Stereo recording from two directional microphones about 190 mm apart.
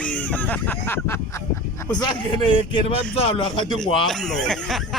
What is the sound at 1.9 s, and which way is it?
A man's voice, 25° left (ahead or behind).